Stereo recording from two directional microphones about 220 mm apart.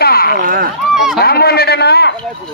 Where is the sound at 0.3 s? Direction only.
40° right (ahead or behind).